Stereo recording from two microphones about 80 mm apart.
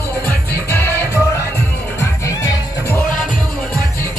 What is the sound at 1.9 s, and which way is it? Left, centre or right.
Music, left.